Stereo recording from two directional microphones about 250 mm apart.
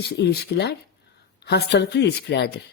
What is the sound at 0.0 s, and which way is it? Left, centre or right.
Speech, left.